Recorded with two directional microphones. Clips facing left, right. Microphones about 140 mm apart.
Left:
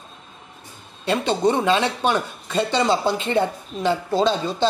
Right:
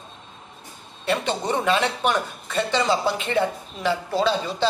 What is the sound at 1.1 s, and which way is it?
Speech, 20° left (ahead or behind).